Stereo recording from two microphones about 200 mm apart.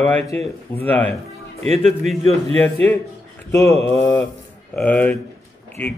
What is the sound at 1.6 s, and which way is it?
Speech, 35° right (ahead or behind).